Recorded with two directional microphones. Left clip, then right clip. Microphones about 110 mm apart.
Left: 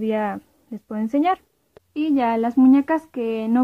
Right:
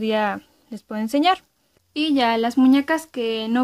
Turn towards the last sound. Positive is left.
turn(degrees=-5)  # may be behind; listen again after turning